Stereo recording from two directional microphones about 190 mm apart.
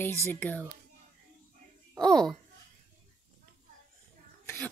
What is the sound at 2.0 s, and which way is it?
Speech, 5° left (ahead or behind).